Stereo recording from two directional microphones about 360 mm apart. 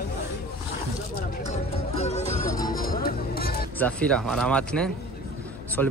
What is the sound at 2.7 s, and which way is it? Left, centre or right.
Music, left.